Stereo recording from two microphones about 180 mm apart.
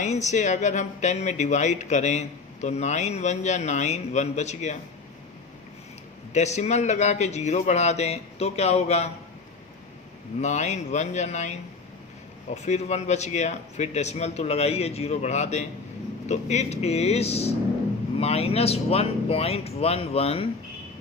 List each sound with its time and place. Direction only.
0.0 s speech: 40° left (ahead or behind)
6.3 s speech: 40° left (ahead or behind)
10.4 s speech: 40° left (ahead or behind)
12.6 s speech: 40° left (ahead or behind)